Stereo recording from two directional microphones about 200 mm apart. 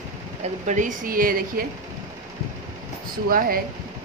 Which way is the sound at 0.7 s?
40° right (ahead or behind).